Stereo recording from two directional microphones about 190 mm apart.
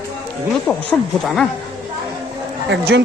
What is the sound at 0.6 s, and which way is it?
Speech, centre (ahead or behind).